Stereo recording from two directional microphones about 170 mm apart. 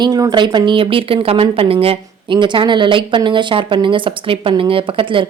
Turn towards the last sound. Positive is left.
turn(degrees=-30)  # may be behind; listen again after turning